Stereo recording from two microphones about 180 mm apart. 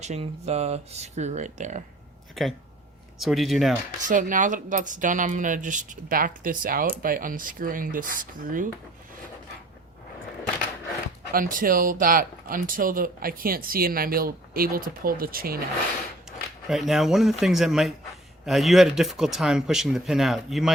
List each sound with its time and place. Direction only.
0.0 s speech: 40° right (ahead or behind)
2.4 s speech: centre (ahead or behind)
4.1 s speech: 45° right (ahead or behind)
11.3 s speech: 50° right (ahead or behind)
16.6 s speech: centre (ahead or behind)